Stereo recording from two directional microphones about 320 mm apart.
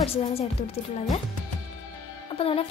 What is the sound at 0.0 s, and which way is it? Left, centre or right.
A woman's voice, centre.